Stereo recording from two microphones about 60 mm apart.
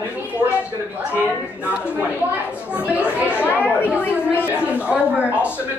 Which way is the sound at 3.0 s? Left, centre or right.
Left.